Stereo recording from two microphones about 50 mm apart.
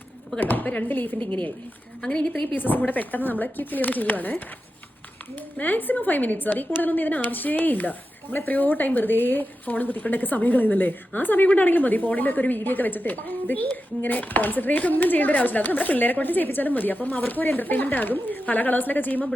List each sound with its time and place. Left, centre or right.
0.3 s speech: left
2.0 s a woman's voice: centre
2.6 s speech: left